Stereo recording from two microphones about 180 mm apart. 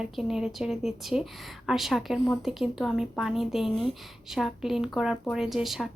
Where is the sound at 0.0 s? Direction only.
5° right (ahead or behind).